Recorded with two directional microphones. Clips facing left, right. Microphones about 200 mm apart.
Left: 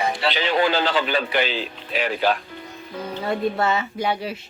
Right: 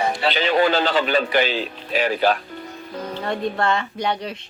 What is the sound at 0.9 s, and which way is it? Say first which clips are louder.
A man's voice: right 3 dB; 45° right (ahead or behind).